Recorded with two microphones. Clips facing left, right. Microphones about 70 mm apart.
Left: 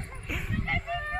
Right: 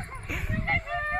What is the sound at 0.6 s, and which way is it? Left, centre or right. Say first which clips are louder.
Music: right 4 dB; right.